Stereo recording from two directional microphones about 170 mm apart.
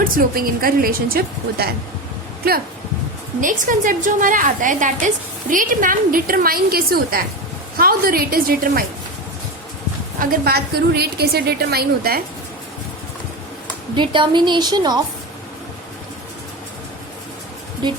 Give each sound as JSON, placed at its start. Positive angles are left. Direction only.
{"t": 0.0, "sound": "a woman's voice", "side_deg": -60}
{"t": 3.4, "sound": "a woman's voice", "side_deg": -50}
{"t": 10.2, "sound": "a woman's voice", "side_deg": -65}
{"t": 13.9, "sound": "a woman's voice", "side_deg": -30}